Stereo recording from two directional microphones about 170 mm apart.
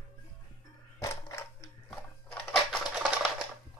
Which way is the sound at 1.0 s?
15° left (ahead or behind).